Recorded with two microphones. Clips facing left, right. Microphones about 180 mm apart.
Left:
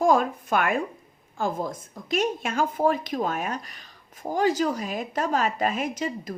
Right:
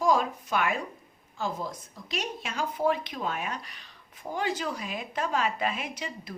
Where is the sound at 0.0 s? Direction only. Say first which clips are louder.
Left 4 dB; 50° left (ahead or behind).